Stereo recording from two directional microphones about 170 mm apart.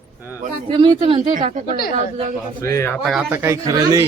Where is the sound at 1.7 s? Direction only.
60° left (ahead or behind).